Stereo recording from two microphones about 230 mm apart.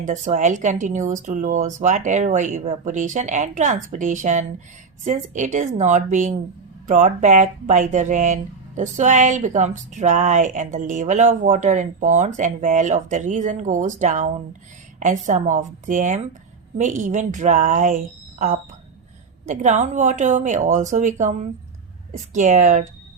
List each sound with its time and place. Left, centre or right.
0.0 s speech: right